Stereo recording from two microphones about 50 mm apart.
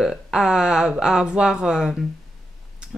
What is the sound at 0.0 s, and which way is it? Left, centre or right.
Speech, centre.